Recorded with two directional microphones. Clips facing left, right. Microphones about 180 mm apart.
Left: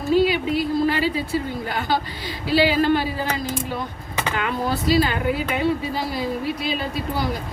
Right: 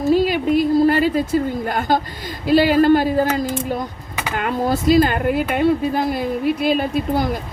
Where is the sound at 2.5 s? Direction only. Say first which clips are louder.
Right 5 dB; 50° right (ahead or behind).